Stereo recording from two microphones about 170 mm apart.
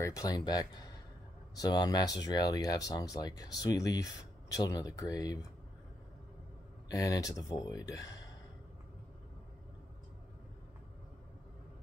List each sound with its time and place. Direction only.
0.0 s speech: 20° left (ahead or behind)
6.9 s speech: 20° left (ahead or behind)